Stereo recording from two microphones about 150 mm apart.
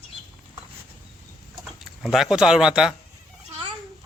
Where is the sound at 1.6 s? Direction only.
Centre (ahead or behind).